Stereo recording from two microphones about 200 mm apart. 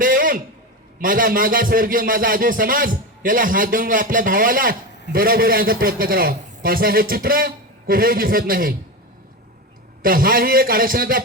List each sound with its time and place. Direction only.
0.0 s a sound: 45° right (ahead or behind)
0.9 s speech: 45° right (ahead or behind)
10.0 s speech: 45° right (ahead or behind)